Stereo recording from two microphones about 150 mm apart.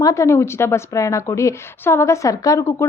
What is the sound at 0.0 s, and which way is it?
A woman's voice, 20° left (ahead or behind).